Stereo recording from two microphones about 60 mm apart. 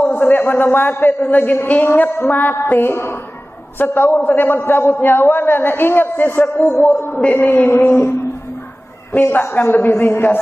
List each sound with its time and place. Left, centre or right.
0.1 s a man's voice: left
2.9 s a woman's voice: left
9.3 s a man's voice: left